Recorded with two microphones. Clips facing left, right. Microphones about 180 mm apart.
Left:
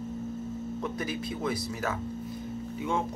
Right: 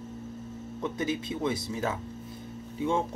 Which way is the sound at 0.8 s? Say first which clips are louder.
Right 5 dB; 20° right (ahead or behind).